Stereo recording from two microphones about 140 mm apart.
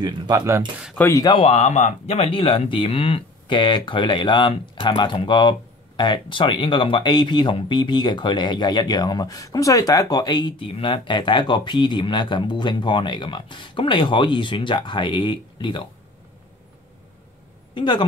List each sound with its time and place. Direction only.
0.0 s speech: 30° right (ahead or behind)
0.9 s speech: 15° left (ahead or behind)
1.4 s speech: 50° left (ahead or behind); by 15.8 s 35° left (ahead or behind)
17.7 s speech: 35° left (ahead or behind)